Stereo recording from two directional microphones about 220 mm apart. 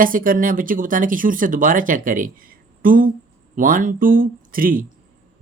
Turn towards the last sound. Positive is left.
turn(degrees=-40)  # may be behind; listen again after turning